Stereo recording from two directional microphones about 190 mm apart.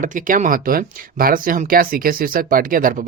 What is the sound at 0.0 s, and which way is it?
Speech, 45° right (ahead or behind).